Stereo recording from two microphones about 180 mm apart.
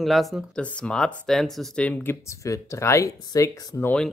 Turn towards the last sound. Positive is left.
turn(degrees=10)  # may be behind; listen again after turning